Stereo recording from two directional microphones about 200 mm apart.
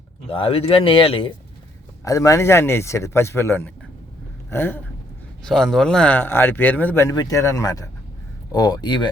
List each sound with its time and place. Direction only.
0.3 s speech: 25° left (ahead or behind)
2.0 s speech: 15° left (ahead or behind)
4.4 s a sound: 10° left (ahead or behind)
5.5 s speech: centre (ahead or behind); by 9.0 s 20° left (ahead or behind)